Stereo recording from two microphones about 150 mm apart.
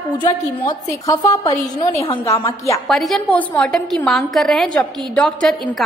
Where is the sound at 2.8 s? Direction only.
Centre (ahead or behind).